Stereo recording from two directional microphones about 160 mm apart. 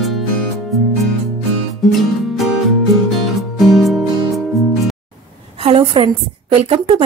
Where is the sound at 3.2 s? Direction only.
Centre (ahead or behind).